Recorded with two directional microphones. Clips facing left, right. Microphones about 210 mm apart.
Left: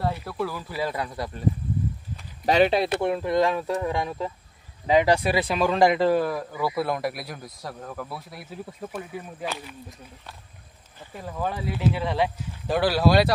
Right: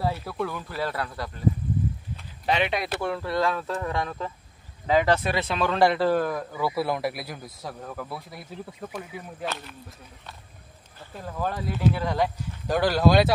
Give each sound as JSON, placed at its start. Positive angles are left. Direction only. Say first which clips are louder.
{"t": 0.0, "sound": "speech", "louder": "even", "side_deg": 0}
{"t": 2.4, "sound": "speech", "louder": "left 6 dB", "side_deg": 40}